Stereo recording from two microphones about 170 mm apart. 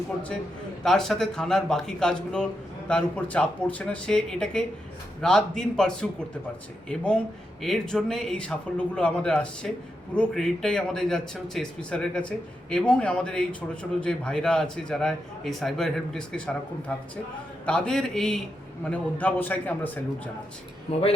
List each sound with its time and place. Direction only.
0.8 s a man's voice: 5° left (ahead or behind)
17.7 s a man's voice: 5° left (ahead or behind)
20.9 s speech: 35° left (ahead or behind)